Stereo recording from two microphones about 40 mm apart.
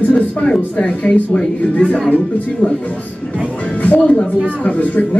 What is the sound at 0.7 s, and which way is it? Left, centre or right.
Speech, left.